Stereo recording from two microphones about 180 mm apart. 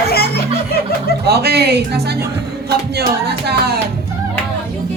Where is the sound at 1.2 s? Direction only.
65° right (ahead or behind).